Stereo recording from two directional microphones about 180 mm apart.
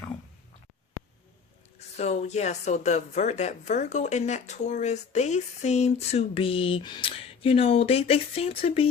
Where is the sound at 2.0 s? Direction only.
40° left (ahead or behind).